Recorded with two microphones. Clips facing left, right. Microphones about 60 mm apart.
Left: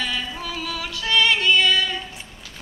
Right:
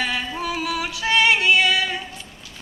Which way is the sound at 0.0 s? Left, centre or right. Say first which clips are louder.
Right 3 dB; right.